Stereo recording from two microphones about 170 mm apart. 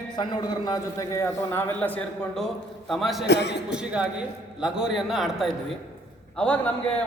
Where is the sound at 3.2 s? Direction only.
85° left.